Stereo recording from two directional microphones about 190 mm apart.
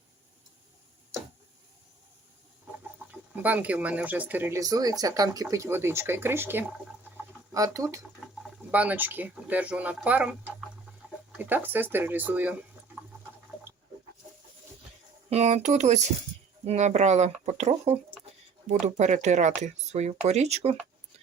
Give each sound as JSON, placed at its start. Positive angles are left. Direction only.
{"t": 3.1, "sound": "speech", "side_deg": -10}
{"t": 15.3, "sound": "speech", "side_deg": -35}